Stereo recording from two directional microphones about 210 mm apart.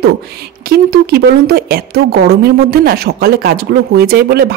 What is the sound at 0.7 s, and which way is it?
A woman's voice, 45° right (ahead or behind).